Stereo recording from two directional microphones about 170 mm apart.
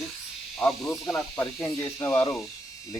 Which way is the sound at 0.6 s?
Centre (ahead or behind).